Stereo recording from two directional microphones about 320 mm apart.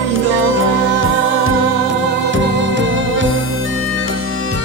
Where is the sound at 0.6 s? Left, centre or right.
Right.